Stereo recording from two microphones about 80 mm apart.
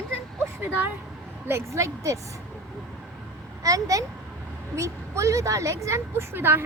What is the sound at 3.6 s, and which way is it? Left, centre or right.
A woman's voice, right.